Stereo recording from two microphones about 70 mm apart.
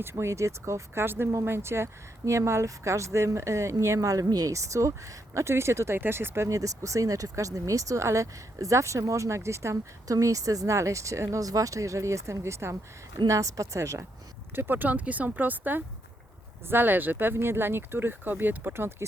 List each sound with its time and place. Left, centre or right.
0.0 s speech: right
4.5 s speech: right
13.1 s speech: right
14.5 s speech: right